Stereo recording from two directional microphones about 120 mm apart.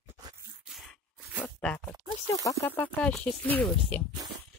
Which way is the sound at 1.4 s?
10° left (ahead or behind).